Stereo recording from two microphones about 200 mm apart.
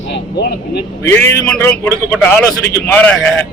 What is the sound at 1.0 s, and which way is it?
A man's voice, 10° left (ahead or behind).